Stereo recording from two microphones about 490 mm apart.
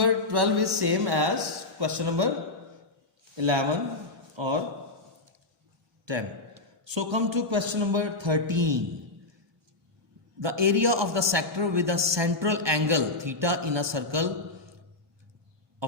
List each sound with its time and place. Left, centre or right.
0.0 s speech: right
3.3 s a man's voice: right
6.1 s a man's voice: right
10.4 s a man's voice: right
15.8 s a sound: right